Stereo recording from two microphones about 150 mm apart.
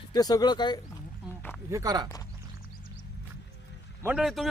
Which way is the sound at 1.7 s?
25° right (ahead or behind).